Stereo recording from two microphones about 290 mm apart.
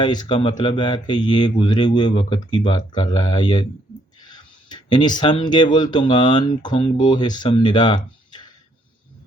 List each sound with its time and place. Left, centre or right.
0.0 s speech: centre